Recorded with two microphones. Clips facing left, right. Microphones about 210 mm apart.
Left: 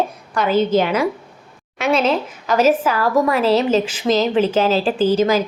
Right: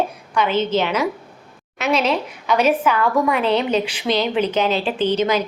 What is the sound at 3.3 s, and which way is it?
Speech, 5° left (ahead or behind).